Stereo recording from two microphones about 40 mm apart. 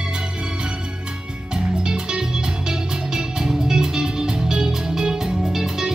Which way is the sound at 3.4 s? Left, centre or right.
Centre.